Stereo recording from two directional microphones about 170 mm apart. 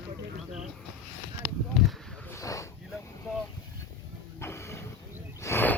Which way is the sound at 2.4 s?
20° left (ahead or behind).